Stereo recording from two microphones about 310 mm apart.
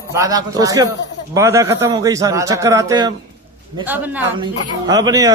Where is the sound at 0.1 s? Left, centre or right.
Centre.